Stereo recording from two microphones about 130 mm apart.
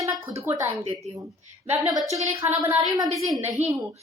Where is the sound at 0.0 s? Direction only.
25° right (ahead or behind).